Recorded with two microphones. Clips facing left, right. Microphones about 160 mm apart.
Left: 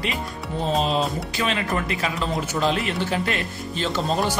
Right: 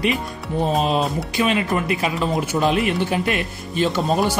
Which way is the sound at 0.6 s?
15° right (ahead or behind).